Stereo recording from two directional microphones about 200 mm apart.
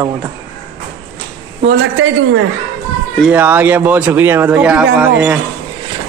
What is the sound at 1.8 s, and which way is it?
Speech, 65° right (ahead or behind).